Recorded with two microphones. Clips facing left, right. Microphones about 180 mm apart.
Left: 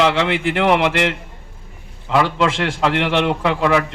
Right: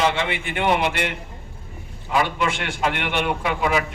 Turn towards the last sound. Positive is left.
turn(degrees=70)  # may be behind; listen again after turning